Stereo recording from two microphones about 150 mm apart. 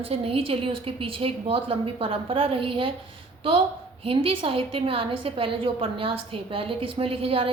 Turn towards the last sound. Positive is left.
turn(degrees=-40)  # may be behind; listen again after turning